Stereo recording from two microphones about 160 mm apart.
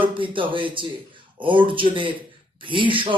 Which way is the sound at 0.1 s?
30° right (ahead or behind).